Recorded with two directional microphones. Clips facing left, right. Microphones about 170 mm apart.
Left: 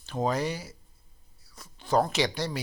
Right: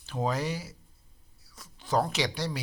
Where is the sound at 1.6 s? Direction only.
Centre (ahead or behind).